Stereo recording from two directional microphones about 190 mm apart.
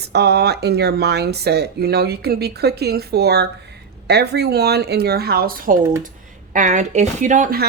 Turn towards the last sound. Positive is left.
turn(degrees=-40)  # may be behind; listen again after turning